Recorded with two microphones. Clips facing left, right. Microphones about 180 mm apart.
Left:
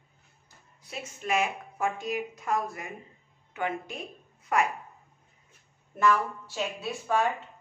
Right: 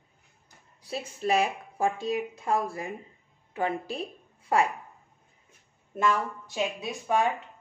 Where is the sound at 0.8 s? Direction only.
35° right (ahead or behind).